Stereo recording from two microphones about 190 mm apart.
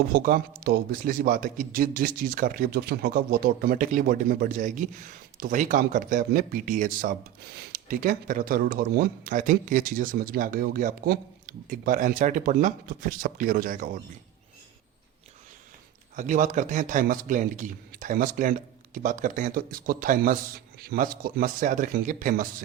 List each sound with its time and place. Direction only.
0.1 s speech: 50° right (ahead or behind)
16.1 s speech: 45° right (ahead or behind)